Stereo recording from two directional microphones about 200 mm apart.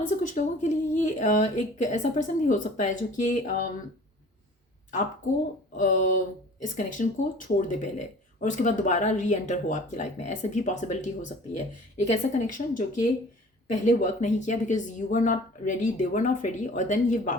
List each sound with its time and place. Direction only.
0.2 s speech: 40° left (ahead or behind)
5.7 s speech: 40° left (ahead or behind)